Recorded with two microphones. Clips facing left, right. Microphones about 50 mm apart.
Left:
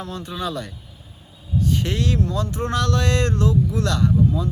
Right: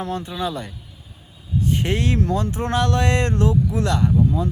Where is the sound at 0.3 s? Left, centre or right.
Centre.